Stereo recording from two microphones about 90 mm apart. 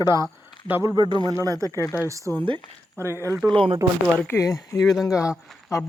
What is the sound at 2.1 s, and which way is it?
Speech, 35° right (ahead or behind).